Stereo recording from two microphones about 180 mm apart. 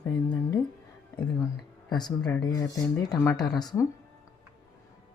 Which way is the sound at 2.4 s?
20° left (ahead or behind).